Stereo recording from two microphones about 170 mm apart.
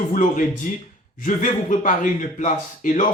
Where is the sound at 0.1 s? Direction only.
50° left (ahead or behind).